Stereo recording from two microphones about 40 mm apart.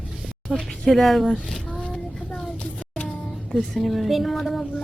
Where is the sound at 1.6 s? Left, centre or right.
Left.